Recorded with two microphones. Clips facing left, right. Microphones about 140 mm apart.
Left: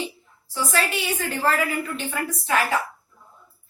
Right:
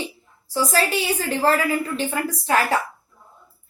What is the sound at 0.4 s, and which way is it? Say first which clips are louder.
Speech: right 4 dB; 35° right (ahead or behind).